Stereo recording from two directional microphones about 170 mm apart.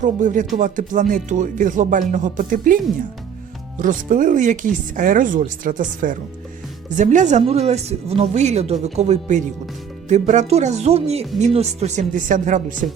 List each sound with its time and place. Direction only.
0.0 s speech: 50° right (ahead or behind)
3.8 s speech: 50° right (ahead or behind)